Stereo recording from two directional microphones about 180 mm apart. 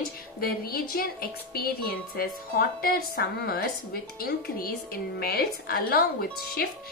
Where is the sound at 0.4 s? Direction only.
55° left (ahead or behind).